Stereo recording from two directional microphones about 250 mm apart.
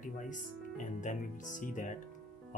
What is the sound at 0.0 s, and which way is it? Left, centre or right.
Speech, left.